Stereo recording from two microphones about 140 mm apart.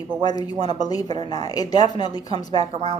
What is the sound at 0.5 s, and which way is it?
Speech, 45° right (ahead or behind).